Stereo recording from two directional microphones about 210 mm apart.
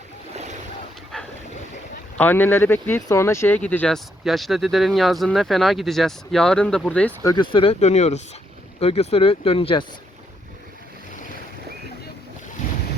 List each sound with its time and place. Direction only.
1.1 s boat: 5° left (ahead or behind)
2.1 s speech: 10° left (ahead or behind); by 9.8 s 25° left (ahead or behind)